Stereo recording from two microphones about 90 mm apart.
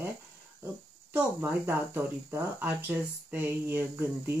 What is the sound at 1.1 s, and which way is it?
Speech, 25° right (ahead or behind).